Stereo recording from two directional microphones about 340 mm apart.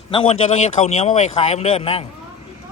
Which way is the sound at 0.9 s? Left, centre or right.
Centre.